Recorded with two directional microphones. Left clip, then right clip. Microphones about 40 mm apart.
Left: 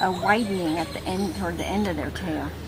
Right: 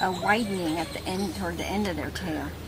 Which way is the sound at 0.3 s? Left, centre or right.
Centre.